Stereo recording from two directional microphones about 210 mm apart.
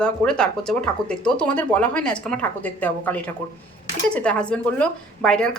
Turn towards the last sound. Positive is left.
turn(degrees=5)  # may be behind; listen again after turning